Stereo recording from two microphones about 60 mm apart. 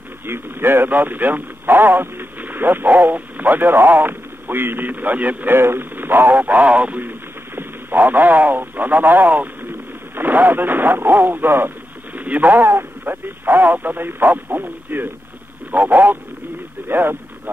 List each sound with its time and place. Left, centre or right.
0.3 s a man's voice: right